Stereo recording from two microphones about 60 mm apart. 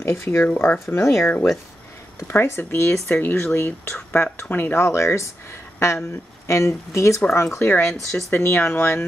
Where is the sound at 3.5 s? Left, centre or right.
Left.